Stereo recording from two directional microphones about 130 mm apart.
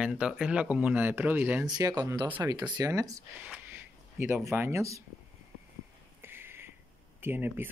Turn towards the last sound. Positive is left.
turn(degrees=-15)  # may be behind; listen again after turning